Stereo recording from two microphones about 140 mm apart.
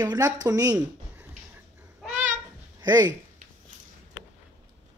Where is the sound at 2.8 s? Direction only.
30° right (ahead or behind).